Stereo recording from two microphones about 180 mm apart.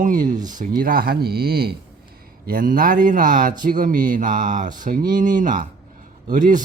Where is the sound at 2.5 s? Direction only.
50° right (ahead or behind).